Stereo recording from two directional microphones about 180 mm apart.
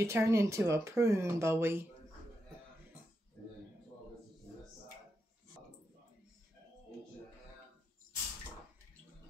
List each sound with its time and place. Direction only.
0.0 s speech: 15° right (ahead or behind)